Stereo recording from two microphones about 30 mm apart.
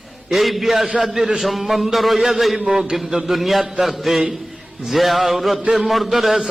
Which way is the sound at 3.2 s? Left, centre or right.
Centre.